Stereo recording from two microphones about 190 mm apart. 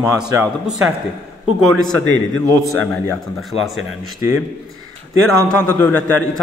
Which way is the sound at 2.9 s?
Centre (ahead or behind).